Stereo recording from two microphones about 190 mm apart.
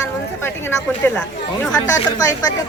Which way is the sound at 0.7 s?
10° left (ahead or behind).